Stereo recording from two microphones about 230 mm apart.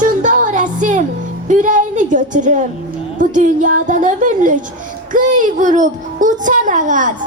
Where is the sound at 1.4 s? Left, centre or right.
Right.